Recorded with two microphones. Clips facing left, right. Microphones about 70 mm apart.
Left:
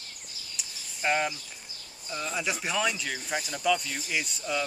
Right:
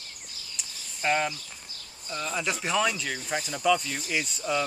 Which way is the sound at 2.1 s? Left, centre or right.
Centre.